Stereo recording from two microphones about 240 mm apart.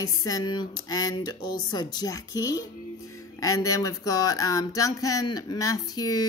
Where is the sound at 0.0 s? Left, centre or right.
Centre.